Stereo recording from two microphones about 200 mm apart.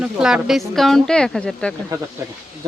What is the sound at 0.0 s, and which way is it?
Speech, 5° right (ahead or behind).